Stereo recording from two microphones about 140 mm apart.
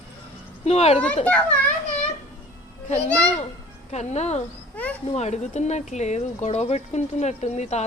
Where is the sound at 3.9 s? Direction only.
55° left (ahead or behind).